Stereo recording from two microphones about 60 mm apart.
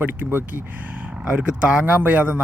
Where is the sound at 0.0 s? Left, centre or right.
Right.